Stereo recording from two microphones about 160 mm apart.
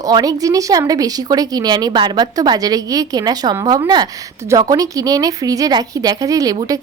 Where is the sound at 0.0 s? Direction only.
25° right (ahead or behind).